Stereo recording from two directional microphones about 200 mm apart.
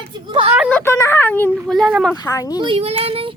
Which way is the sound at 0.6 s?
5° left (ahead or behind).